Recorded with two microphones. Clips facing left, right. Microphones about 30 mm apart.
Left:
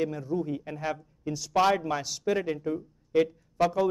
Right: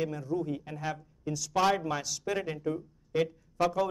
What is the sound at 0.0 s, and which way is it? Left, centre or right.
A man's voice, centre.